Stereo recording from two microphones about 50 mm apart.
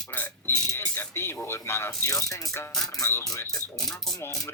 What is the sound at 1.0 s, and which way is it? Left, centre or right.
Speech, left.